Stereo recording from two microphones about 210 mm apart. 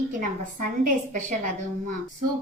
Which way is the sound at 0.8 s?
40° right (ahead or behind).